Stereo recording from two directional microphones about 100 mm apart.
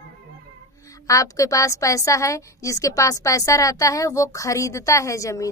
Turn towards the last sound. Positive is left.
turn(degrees=30)  # may be behind; listen again after turning